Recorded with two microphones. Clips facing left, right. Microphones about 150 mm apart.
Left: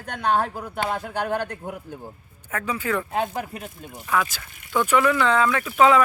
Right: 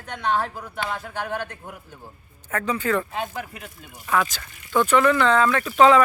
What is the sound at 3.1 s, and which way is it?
Speech, 40° left (ahead or behind).